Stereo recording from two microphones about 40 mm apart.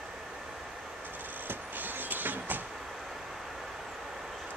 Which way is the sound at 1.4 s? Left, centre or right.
Right.